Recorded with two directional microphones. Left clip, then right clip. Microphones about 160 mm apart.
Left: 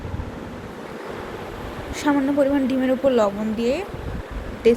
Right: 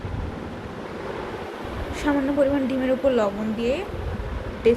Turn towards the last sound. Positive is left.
turn(degrees=20)  # may be behind; listen again after turning